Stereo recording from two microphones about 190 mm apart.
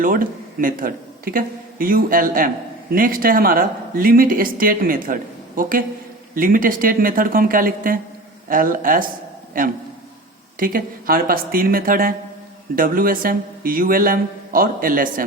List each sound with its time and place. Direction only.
0.0 s speech: 45° right (ahead or behind)
10.6 s speech: 45° right (ahead or behind)